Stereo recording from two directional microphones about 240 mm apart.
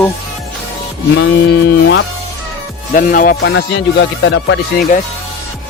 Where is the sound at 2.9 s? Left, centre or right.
Left.